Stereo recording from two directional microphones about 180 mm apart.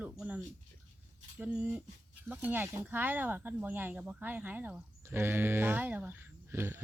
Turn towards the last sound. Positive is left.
turn(degrees=-15)  # may be behind; listen again after turning